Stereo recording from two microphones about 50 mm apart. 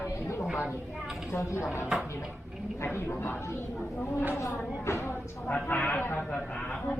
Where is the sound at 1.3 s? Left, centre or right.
Left.